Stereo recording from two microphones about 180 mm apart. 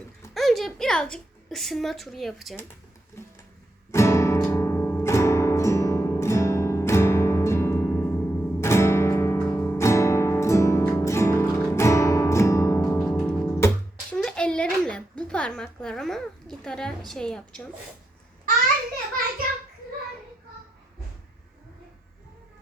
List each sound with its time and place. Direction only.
0.3 s a woman's voice: centre (ahead or behind)
3.9 s music: 15° left (ahead or behind)
14.1 s a sound: 5° left (ahead or behind)
17.1 s a woman's voice: 5° left (ahead or behind)